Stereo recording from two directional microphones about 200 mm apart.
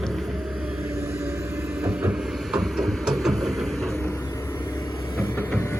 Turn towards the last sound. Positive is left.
turn(degrees=10)  # may be behind; listen again after turning